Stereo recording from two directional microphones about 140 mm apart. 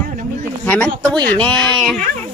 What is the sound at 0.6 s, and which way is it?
Speech, 10° left (ahead or behind).